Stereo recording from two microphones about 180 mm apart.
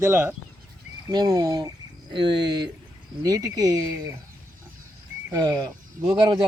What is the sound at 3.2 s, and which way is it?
Speech, 20° right (ahead or behind).